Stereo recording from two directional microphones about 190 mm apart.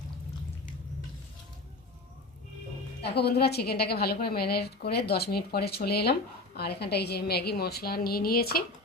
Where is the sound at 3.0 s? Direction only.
60° left (ahead or behind).